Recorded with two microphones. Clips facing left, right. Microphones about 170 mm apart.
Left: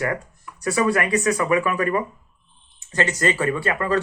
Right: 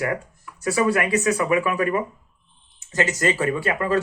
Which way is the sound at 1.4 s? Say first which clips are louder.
Even; 10° right (ahead or behind).